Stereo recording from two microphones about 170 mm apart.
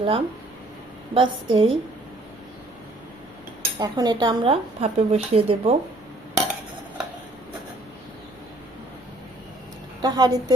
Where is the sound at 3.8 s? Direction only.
25° right (ahead or behind).